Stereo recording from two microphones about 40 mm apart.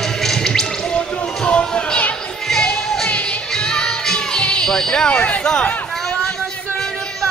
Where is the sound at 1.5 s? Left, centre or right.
Left.